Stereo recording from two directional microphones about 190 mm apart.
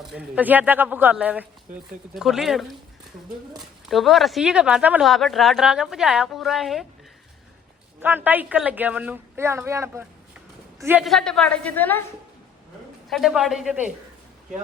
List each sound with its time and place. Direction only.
0.1 s speech: 5° right (ahead or behind)
8.0 s a man's voice: 10° right (ahead or behind)
11.0 s a woman's voice: centre (ahead or behind)
13.1 s speech: centre (ahead or behind)